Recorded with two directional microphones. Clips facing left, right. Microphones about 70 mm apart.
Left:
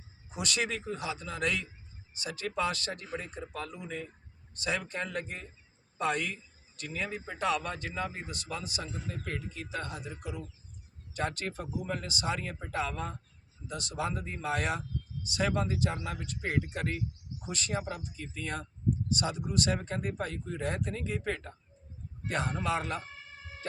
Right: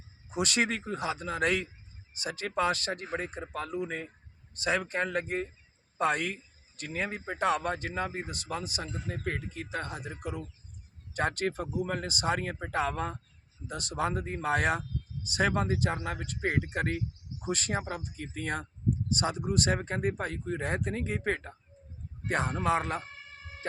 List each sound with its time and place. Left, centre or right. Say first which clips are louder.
0.3 s a man's voice: right 4 dB; right
4.5 s a man's voice: right 4 dB; right